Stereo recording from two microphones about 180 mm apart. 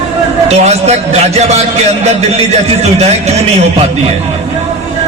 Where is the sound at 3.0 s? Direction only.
35° right (ahead or behind).